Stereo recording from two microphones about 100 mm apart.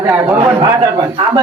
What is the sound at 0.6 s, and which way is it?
Speech, 40° right (ahead or behind).